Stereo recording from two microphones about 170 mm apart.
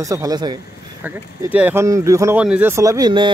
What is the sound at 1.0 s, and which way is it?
Speech, 10° right (ahead or behind).